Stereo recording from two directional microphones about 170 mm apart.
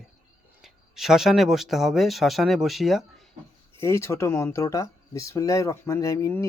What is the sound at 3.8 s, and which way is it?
Speech, 15° left (ahead or behind).